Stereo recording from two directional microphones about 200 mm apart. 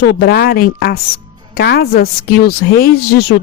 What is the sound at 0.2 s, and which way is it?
Speech, 50° left (ahead or behind).